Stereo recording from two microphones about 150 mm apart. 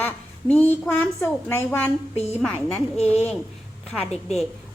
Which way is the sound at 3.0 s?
45° left (ahead or behind).